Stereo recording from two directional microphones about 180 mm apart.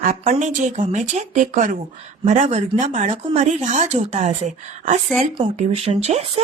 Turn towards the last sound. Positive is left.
turn(degrees=-35)  # may be behind; listen again after turning